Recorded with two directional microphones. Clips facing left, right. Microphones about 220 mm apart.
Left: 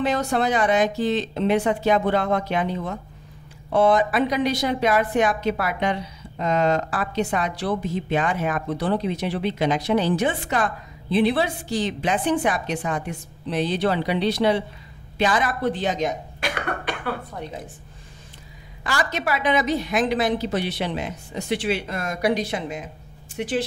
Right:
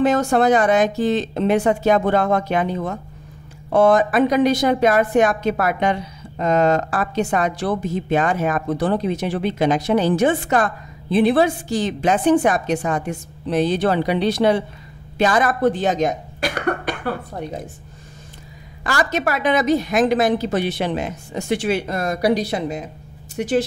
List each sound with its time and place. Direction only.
0.0 s a woman's voice: 45° right (ahead or behind)
18.9 s a woman's voice: 45° right (ahead or behind)